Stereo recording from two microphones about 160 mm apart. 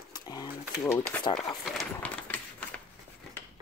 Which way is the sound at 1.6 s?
Centre (ahead or behind).